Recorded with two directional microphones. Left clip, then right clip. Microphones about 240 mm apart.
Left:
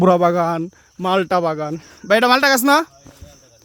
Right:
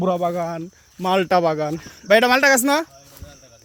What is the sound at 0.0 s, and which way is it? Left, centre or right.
Speech, left.